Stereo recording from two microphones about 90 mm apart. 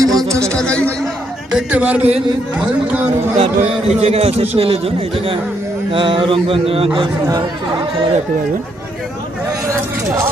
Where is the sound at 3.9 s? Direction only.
90° right.